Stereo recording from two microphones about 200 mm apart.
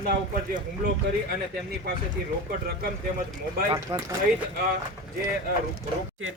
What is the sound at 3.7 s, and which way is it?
Speech, 20° right (ahead or behind).